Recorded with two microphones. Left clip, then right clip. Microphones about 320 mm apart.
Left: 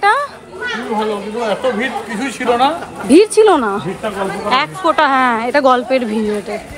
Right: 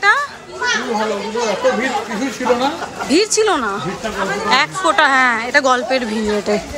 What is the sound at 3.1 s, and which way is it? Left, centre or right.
A woman's voice, centre.